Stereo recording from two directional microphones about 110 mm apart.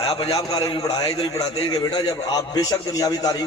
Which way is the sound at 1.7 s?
35° left (ahead or behind).